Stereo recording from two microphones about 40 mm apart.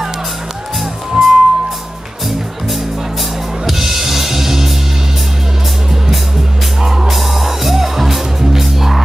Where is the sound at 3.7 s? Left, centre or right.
Centre.